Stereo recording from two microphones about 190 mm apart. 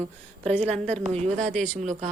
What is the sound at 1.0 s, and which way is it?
Speech, 35° right (ahead or behind).